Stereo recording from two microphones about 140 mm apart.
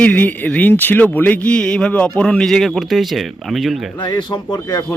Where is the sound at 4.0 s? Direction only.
30° left (ahead or behind).